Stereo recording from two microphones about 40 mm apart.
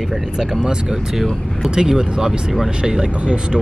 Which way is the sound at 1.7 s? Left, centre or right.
Centre.